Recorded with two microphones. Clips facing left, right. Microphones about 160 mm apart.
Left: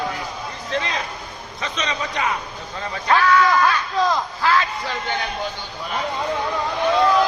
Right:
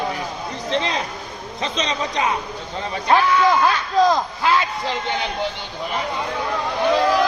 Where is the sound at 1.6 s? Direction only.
30° right (ahead or behind).